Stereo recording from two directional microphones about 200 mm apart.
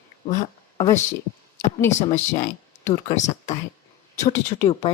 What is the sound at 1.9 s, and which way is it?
Speech, 35° left (ahead or behind).